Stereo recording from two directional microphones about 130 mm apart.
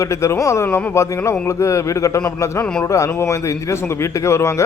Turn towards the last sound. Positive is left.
turn(degrees=20)  # may be behind; listen again after turning